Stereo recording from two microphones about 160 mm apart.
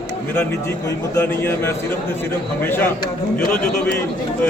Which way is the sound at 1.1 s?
15° left (ahead or behind).